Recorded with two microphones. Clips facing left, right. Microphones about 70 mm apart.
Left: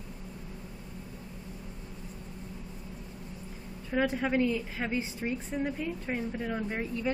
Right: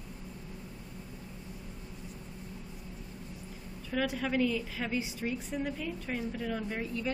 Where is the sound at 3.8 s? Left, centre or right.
Left.